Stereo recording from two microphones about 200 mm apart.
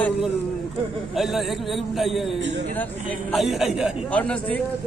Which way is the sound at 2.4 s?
60° right (ahead or behind).